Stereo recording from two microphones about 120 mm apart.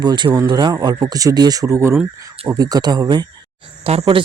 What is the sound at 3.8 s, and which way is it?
Speech, 55° right (ahead or behind).